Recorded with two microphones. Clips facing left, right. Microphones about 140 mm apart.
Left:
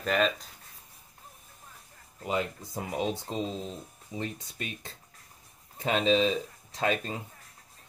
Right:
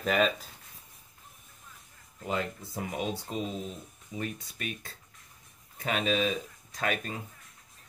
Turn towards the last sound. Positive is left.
turn(degrees=25)  # may be behind; listen again after turning